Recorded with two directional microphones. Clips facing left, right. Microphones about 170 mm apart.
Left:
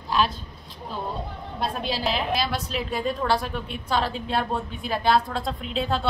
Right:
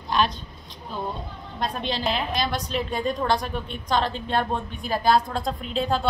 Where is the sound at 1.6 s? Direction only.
5° left (ahead or behind).